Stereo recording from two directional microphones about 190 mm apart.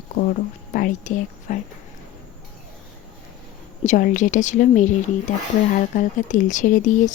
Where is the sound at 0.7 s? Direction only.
45° left (ahead or behind).